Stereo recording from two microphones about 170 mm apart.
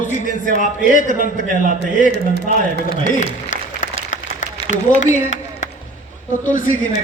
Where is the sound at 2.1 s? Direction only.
80° right.